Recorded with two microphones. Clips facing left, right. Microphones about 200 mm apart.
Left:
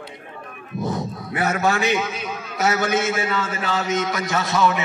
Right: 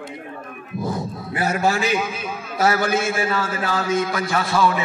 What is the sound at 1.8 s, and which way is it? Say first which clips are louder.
Speech: even; 25° left (ahead or behind).